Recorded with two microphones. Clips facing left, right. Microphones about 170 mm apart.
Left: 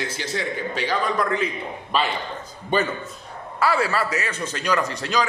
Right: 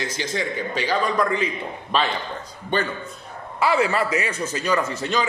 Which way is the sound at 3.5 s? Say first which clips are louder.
Right 1 dB; 20° right (ahead or behind).